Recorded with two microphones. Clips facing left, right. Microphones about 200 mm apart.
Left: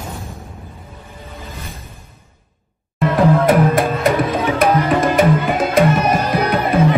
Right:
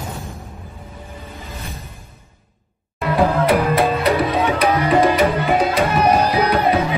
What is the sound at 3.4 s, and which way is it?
Music, 45° left (ahead or behind).